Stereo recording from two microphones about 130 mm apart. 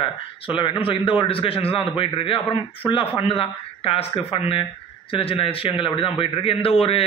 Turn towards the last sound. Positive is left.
turn(degrees=50)  # may be behind; listen again after turning